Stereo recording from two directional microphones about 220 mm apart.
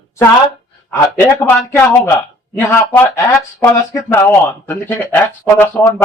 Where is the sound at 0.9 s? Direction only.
10° left (ahead or behind).